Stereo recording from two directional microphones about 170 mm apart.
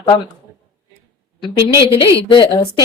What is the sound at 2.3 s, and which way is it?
Speech, 25° left (ahead or behind).